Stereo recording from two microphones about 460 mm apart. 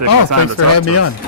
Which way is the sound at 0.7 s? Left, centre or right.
Left.